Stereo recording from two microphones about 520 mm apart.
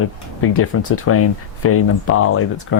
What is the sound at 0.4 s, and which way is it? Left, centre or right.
Speech, left.